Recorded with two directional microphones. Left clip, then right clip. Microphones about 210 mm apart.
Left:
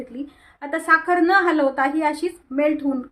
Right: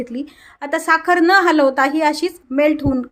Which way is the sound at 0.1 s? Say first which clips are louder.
Right 6 dB; 45° right (ahead or behind).